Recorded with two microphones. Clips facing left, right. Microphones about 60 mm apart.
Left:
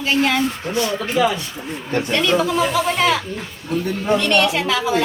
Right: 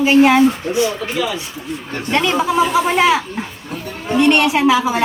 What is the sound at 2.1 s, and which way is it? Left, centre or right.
Speech, centre.